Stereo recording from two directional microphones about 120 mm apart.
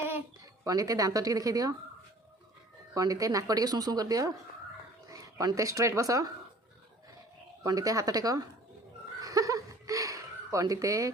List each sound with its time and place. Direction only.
0.6 s speech: 30° right (ahead or behind)
2.9 s speech: 30° right (ahead or behind)
7.6 s speech: 30° right (ahead or behind)
9.2 s a sound: 30° right (ahead or behind)